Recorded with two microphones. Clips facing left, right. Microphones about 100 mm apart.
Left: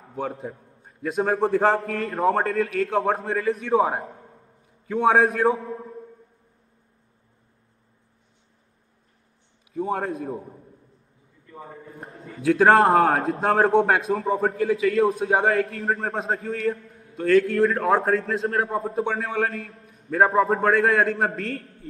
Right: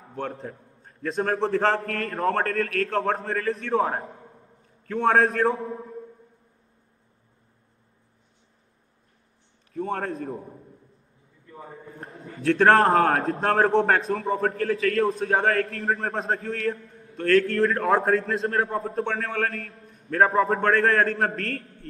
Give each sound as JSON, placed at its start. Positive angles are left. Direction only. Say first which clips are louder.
{"t": 0.1, "sound": "a man's voice", "louder": "left 2 dB", "side_deg": 5}
{"t": 9.8, "sound": "a man's voice", "louder": "left 2 dB", "side_deg": 5}
{"t": 11.9, "sound": "a man's voice", "louder": "even", "side_deg": 5}